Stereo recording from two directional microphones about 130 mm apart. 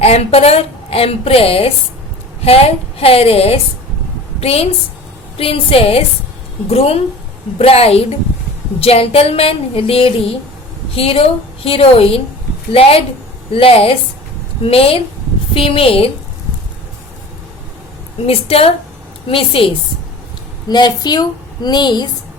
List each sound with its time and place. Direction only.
0.0 s a woman's voice: 50° left (ahead or behind)
18.3 s a woman's voice: 50° left (ahead or behind)
20.7 s a woman's voice: 35° left (ahead or behind)